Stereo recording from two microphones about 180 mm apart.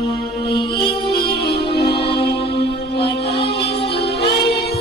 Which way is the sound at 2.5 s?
65° left (ahead or behind).